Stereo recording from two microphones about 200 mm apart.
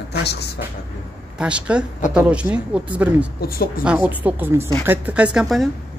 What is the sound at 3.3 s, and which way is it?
Speech, 50° left (ahead or behind).